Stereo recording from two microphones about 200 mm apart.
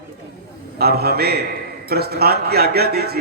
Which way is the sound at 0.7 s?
50° right (ahead or behind).